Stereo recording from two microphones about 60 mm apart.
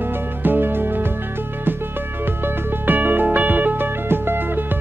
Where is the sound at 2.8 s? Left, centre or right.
Right.